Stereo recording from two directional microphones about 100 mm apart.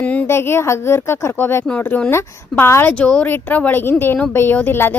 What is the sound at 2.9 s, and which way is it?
Speech, 15° left (ahead or behind).